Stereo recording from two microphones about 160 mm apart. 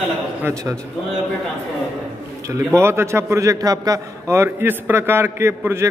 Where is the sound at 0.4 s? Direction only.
15° right (ahead or behind).